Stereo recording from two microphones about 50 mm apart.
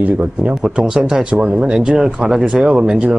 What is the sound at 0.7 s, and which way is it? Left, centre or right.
Speech, centre.